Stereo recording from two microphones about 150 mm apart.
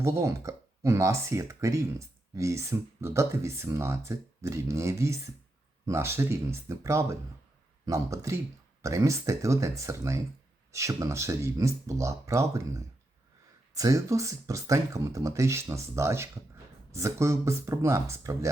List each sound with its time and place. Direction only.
0.0 s speech: 20° right (ahead or behind)